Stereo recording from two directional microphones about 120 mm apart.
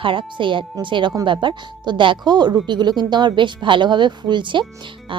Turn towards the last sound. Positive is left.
turn(degrees=-40)  # may be behind; listen again after turning